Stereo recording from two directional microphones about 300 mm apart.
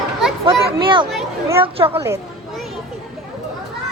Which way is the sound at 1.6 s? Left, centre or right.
Centre.